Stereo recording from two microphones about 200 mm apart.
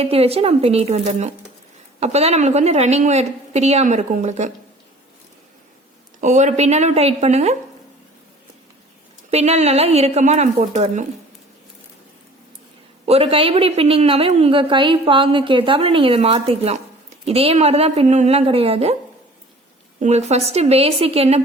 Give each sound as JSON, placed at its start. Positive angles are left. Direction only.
{"t": 0.0, "sound": "a woman's voice", "side_deg": -30}
{"t": 6.1, "sound": "a woman's voice", "side_deg": -35}
{"t": 9.3, "sound": "a woman's voice", "side_deg": -35}
{"t": 13.1, "sound": "a woman's voice", "side_deg": -30}
{"t": 20.0, "sound": "a woman's voice", "side_deg": -35}